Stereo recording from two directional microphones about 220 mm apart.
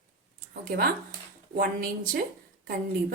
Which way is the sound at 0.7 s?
45° right (ahead or behind).